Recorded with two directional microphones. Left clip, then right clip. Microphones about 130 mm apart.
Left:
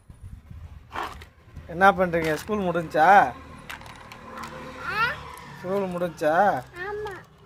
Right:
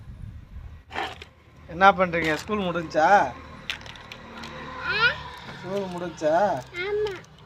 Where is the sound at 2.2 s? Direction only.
10° left (ahead or behind).